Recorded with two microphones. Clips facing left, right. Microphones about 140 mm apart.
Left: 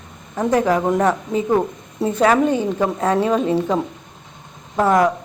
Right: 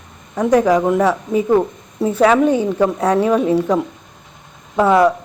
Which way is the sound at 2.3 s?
10° right (ahead or behind).